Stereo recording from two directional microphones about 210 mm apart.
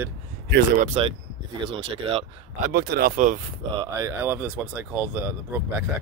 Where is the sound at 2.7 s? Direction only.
50° right (ahead or behind).